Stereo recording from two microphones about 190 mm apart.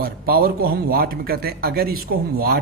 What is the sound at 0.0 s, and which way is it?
Speech, 50° right (ahead or behind).